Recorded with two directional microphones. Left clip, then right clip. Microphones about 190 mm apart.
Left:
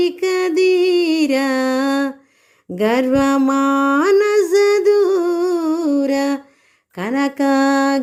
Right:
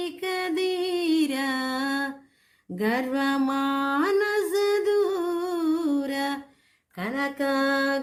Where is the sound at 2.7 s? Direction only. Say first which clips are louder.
Left 10 dB; 40° left (ahead or behind).